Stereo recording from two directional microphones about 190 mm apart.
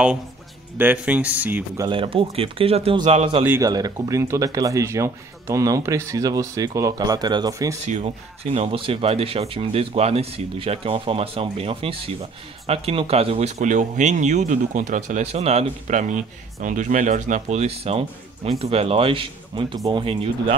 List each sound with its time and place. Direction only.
0.7 s speech: 10° right (ahead or behind)
1.9 s speech: 30° right (ahead or behind)
3.4 s speech: 15° right (ahead or behind)
7.8 s speech: 35° right (ahead or behind)